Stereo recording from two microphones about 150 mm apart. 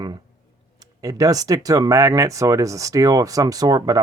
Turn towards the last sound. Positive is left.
turn(degrees=-25)  # may be behind; listen again after turning